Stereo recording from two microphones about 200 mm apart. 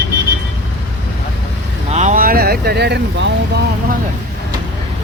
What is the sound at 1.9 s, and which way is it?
Vehicle, 35° right (ahead or behind).